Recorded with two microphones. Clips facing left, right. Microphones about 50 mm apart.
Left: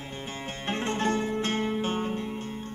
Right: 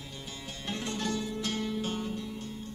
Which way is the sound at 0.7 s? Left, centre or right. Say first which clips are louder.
Left 6 dB; left.